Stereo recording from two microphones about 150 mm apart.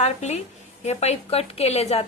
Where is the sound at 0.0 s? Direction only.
50° left (ahead or behind).